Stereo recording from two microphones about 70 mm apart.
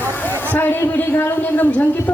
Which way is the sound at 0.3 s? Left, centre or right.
Left.